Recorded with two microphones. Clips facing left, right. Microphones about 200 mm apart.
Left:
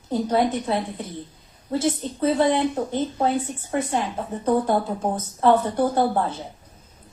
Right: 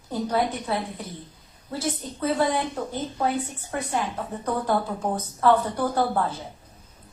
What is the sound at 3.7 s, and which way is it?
A woman's voice, 25° left (ahead or behind).